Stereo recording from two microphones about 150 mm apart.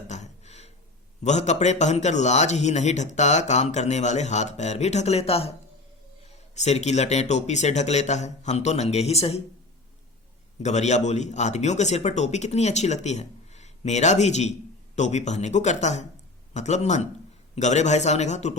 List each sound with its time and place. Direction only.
0.1 s a sound: 50° left (ahead or behind)
1.2 s a man's voice: 50° left (ahead or behind)
10.6 s a man's voice: 50° left (ahead or behind)